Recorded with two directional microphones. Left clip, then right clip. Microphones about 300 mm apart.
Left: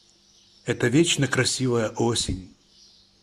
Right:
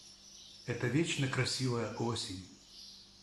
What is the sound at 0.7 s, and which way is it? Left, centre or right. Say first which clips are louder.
Speech: left 13 dB; left.